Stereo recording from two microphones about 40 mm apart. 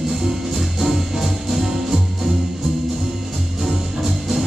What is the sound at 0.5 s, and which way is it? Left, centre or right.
Music, centre.